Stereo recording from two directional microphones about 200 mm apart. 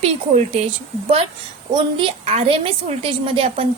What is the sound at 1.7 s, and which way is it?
A woman's voice, 25° right (ahead or behind).